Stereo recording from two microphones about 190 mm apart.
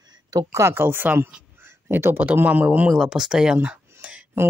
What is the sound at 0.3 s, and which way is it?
Speech, 15° right (ahead or behind).